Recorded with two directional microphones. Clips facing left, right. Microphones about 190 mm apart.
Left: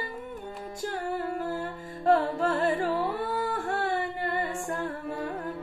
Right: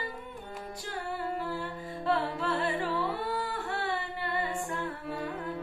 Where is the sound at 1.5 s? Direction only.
45° left (ahead or behind).